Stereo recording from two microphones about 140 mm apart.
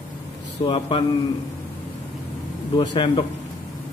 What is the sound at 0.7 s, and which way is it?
Speech, 35° left (ahead or behind).